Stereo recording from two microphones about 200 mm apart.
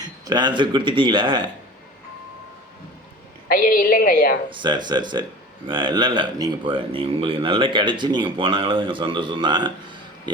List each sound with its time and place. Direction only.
0.0 s speech: 20° right (ahead or behind)
3.5 s a woman's voice: 45° left (ahead or behind)
4.4 s speech: 25° right (ahead or behind)